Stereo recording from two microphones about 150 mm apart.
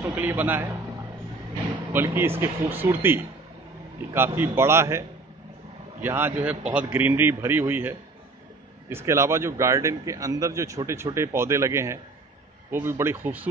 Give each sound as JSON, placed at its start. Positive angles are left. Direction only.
{"t": 0.0, "sound": "a man's voice", "side_deg": -15}
{"t": 1.9, "sound": "a man's voice", "side_deg": -15}
{"t": 6.0, "sound": "a man's voice", "side_deg": -15}